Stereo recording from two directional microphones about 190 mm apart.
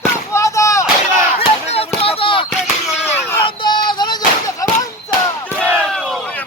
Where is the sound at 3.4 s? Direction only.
25° left (ahead or behind).